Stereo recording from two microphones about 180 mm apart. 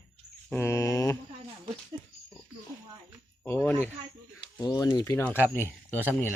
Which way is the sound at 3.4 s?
10° left (ahead or behind).